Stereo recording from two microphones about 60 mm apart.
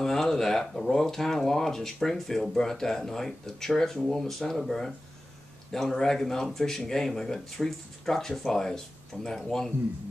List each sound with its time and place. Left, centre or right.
0.0 s speech: centre